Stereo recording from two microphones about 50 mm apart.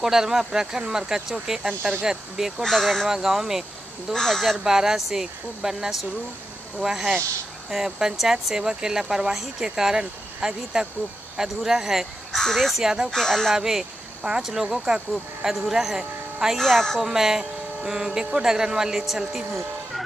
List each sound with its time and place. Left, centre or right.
0.0 s speech: centre
1.7 s speech: right
2.3 s speech: centre
2.6 s speech: centre
4.1 s speech: centre
4.6 s speech: centre
12.4 s speech: centre
12.8 s speech: centre
13.1 s speech: centre
13.5 s speech: centre
16.5 s speech: centre
17.0 s speech: centre